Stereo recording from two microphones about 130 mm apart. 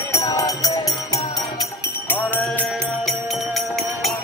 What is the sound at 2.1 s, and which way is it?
Music, 15° left (ahead or behind).